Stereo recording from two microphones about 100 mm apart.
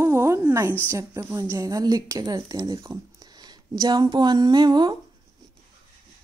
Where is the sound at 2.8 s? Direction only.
35° right (ahead or behind).